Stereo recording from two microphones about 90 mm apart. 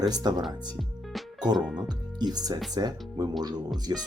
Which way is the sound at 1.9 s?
50° right (ahead or behind).